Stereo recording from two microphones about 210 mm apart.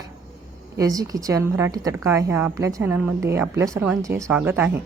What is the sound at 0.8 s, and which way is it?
A woman's voice, 15° right (ahead or behind).